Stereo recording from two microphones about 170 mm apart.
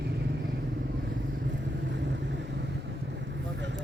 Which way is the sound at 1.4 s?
90° right.